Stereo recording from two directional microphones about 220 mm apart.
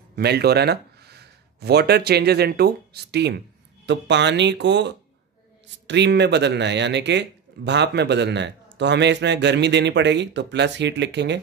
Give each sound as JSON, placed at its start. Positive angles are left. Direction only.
{"t": 0.1, "sound": "speech", "side_deg": -45}